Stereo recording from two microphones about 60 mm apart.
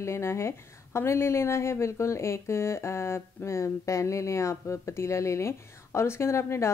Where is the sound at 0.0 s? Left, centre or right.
Left.